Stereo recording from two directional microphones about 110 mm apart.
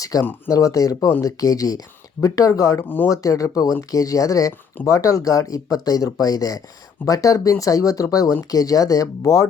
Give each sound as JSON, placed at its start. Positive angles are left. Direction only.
{"t": 0.0, "sound": "speech", "side_deg": 30}
{"t": 2.8, "sound": "speech", "side_deg": 20}
{"t": 3.1, "sound": "speech", "side_deg": 30}